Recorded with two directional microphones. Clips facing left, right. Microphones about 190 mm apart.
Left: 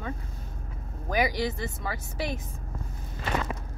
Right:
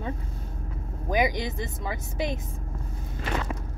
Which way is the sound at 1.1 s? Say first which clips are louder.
Right 1 dB; 20° right (ahead or behind).